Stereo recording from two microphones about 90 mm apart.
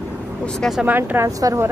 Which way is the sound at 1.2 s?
40° right (ahead or behind).